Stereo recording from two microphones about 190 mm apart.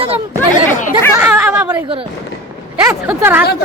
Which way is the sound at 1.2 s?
5° right (ahead or behind).